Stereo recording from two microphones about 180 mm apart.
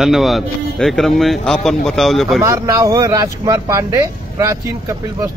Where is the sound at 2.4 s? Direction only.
20° right (ahead or behind).